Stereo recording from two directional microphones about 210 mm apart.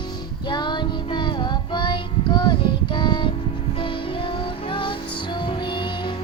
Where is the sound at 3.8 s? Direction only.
25° left (ahead or behind).